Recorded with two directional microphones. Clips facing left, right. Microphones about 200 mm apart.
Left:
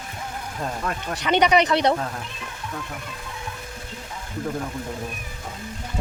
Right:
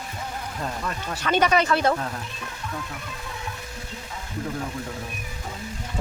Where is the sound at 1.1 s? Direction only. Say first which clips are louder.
Left 2 dB; 15° left (ahead or behind).